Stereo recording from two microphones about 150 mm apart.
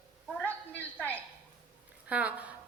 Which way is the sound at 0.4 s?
10° left (ahead or behind).